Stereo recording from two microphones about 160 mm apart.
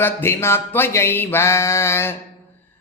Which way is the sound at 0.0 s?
15° left (ahead or behind).